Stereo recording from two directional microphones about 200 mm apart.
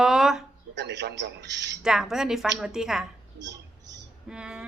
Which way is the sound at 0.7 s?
60° right (ahead or behind).